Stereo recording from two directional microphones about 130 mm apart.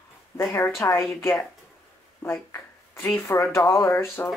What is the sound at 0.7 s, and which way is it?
Speech, 20° left (ahead or behind).